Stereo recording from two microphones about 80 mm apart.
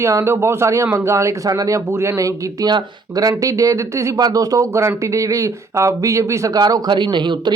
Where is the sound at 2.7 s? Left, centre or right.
Right.